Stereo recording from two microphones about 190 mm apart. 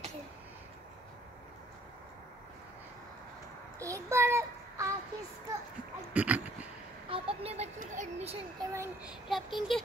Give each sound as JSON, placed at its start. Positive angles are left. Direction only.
{"t": 3.8, "sound": "child singing", "side_deg": -15}
{"t": 6.1, "sound": "a sound", "side_deg": -10}
{"t": 7.1, "sound": "a child's voice", "side_deg": -30}
{"t": 8.5, "sound": "a child's voice", "side_deg": -15}
{"t": 9.3, "sound": "speech", "side_deg": 0}